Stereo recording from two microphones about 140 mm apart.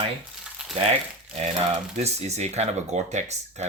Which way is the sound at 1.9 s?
55° right (ahead or behind).